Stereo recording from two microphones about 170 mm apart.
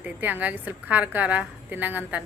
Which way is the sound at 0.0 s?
10° right (ahead or behind).